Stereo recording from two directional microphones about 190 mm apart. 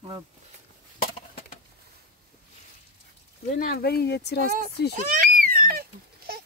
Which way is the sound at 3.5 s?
55° left (ahead or behind).